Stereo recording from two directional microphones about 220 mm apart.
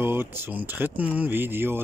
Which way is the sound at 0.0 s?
10° right (ahead or behind).